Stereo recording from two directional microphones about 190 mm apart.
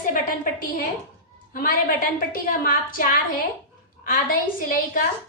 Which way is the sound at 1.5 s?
50° left (ahead or behind).